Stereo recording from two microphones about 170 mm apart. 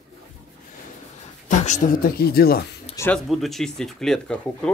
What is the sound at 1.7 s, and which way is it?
Speech, 50° left (ahead or behind).